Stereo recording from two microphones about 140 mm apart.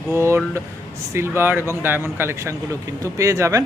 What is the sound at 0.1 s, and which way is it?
Speech, 20° right (ahead or behind).